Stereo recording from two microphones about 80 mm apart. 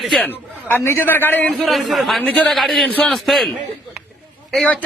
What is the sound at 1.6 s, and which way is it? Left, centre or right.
Speech, centre.